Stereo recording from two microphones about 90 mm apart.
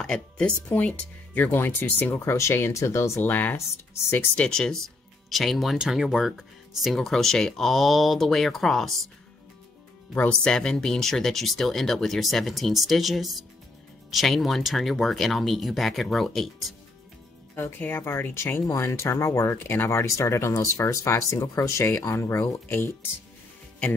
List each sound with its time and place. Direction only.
0.0 s speech: 10° left (ahead or behind); by 3.1 s 35° left (ahead or behind)
3.2 s speech: 20° left (ahead or behind)
4.4 s speech: 10° left (ahead or behind)
10.1 s speech: 15° left (ahead or behind)
17.6 s speech: 25° left (ahead or behind)